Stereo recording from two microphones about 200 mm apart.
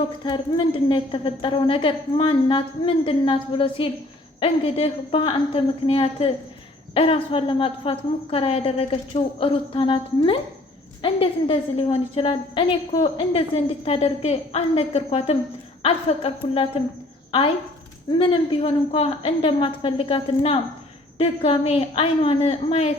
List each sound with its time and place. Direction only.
0.3 s a woman's voice: 20° left (ahead or behind)